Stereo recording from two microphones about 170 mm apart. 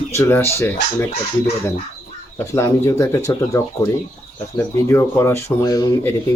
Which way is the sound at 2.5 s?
15° left (ahead or behind).